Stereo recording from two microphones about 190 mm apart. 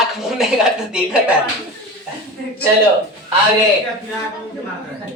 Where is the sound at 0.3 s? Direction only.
5° right (ahead or behind).